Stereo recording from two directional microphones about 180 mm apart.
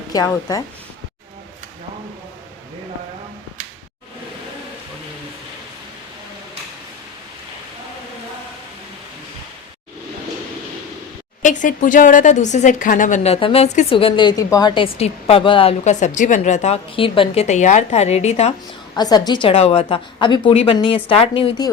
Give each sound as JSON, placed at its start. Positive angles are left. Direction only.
{"t": 0.1, "sound": "a woman's voice", "side_deg": 20}
{"t": 11.4, "sound": "a woman's voice", "side_deg": 45}
{"t": 14.9, "sound": "a woman's voice", "side_deg": 35}
{"t": 18.9, "sound": "a woman's voice", "side_deg": 25}